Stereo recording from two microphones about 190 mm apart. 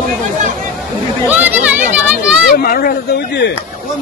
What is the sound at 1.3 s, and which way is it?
Speech, 10° right (ahead or behind).